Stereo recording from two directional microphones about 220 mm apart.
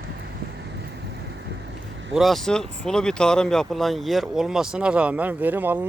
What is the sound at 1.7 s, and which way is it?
Vehicle, 55° right (ahead or behind).